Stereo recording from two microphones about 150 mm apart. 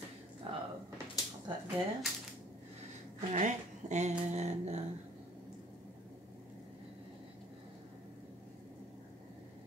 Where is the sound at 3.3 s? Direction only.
50° right (ahead or behind).